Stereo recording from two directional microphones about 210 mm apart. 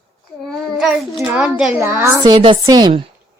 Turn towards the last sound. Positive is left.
turn(degrees=-20)  # may be behind; listen again after turning